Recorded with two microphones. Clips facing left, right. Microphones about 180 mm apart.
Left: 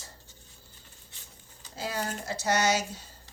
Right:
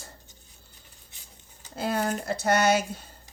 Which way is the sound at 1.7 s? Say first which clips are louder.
Right 6 dB; 55° right (ahead or behind).